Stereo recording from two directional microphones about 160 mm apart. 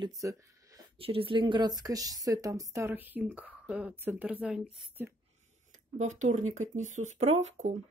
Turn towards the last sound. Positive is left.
turn(degrees=-45)  # may be behind; listen again after turning